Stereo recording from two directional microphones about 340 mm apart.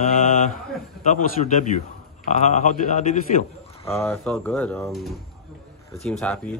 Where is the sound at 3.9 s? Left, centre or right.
Centre.